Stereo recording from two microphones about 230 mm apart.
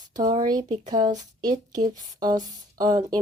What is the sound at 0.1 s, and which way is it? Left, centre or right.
Speech, centre.